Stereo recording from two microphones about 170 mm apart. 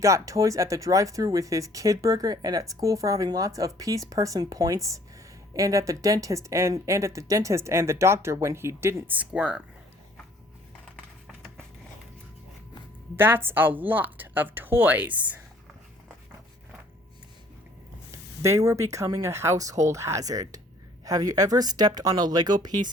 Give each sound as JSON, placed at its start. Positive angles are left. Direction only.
{"t": 0.0, "sound": "speech", "side_deg": -20}
{"t": 13.1, "sound": "speech", "side_deg": -10}
{"t": 18.4, "sound": "speech", "side_deg": -15}